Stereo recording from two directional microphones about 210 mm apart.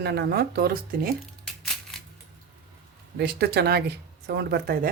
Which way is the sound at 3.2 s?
50° right (ahead or behind).